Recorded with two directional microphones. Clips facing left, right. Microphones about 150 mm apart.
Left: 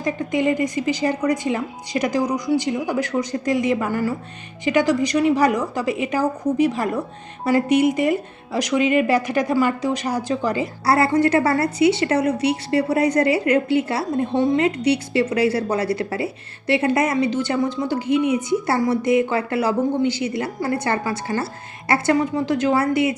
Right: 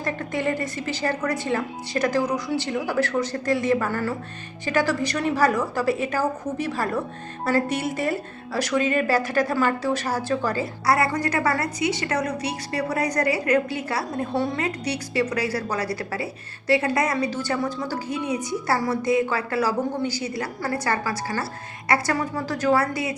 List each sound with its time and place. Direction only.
0.0 s a woman's voice: 15° left (ahead or behind)
10.8 s a woman's voice: 30° left (ahead or behind)